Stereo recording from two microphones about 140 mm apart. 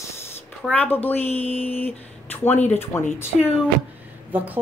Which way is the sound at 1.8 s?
15° left (ahead or behind).